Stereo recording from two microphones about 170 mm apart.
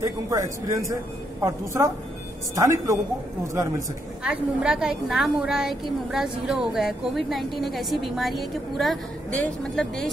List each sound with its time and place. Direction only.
0.0 s a woman's voice: 20° right (ahead or behind)
4.2 s a woman's voice: 5° right (ahead or behind)